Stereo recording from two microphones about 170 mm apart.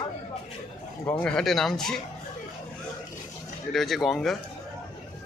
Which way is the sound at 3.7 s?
Centre (ahead or behind).